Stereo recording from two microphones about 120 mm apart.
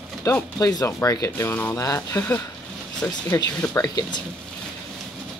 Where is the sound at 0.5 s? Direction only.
30° left (ahead or behind).